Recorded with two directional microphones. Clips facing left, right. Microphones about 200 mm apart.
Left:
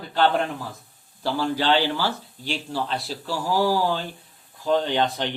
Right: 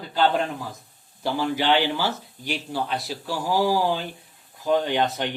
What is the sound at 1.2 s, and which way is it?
Speech, 15° right (ahead or behind).